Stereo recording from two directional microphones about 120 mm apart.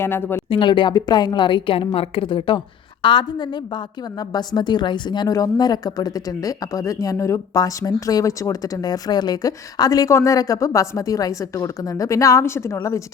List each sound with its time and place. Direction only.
0.0 s speech: 20° left (ahead or behind)
0.5 s a woman's voice: 45° left (ahead or behind); by 13.0 s 25° left (ahead or behind)